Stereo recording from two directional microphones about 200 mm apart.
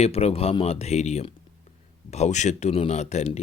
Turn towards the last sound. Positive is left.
turn(degrees=35)  # may be behind; listen again after turning